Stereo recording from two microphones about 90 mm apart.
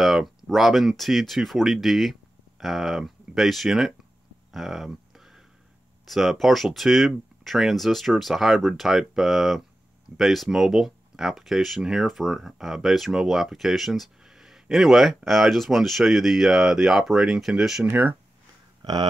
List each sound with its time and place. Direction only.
0.0 s speech: 5° right (ahead or behind)
4.5 s a sound: centre (ahead or behind)
6.0 s speech: centre (ahead or behind)
17.8 s speech: 25° right (ahead or behind)